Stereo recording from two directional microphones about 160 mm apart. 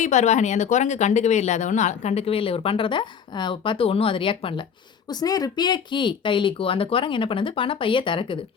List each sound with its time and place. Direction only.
0.0 s speech: 45° left (ahead or behind)